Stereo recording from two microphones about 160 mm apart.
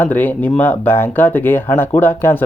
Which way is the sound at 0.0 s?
10° left (ahead or behind).